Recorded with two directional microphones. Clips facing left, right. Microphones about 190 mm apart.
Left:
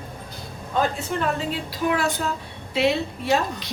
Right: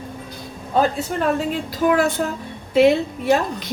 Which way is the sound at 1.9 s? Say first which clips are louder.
Right 5 dB; 50° right (ahead or behind).